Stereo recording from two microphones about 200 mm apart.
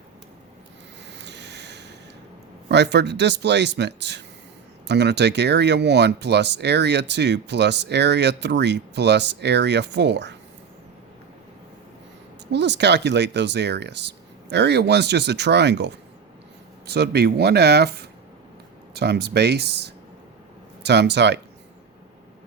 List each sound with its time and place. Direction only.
1.1 s a sound: 60° right (ahead or behind)
2.6 s speech: 60° right (ahead or behind)
12.5 s speech: 60° right (ahead or behind)